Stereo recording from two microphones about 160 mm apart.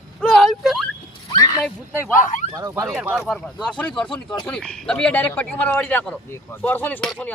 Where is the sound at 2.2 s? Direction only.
55° left (ahead or behind).